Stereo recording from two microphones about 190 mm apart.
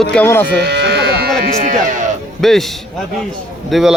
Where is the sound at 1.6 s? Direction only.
40° right (ahead or behind).